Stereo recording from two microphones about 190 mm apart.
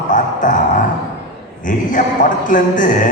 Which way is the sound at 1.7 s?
45° left (ahead or behind).